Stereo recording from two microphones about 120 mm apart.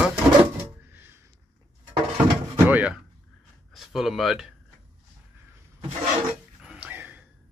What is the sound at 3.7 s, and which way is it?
Speech, centre (ahead or behind).